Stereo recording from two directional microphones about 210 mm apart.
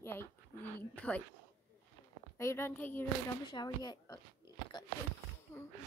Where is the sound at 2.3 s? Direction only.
15° left (ahead or behind).